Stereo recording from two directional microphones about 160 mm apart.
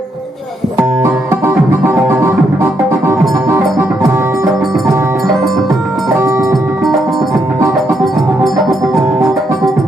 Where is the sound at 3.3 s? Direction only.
20° right (ahead or behind).